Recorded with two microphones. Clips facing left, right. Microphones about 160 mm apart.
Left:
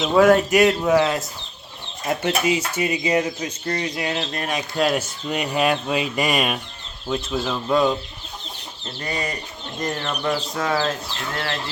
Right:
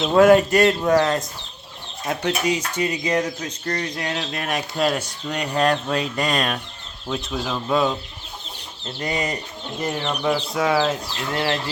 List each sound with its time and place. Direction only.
0.0 s speech: centre (ahead or behind)
7.1 s speech: centre (ahead or behind)
9.0 s speech: 15° right (ahead or behind)